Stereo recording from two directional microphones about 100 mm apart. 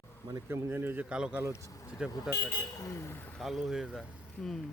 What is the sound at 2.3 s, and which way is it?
Speech, 40° left (ahead or behind).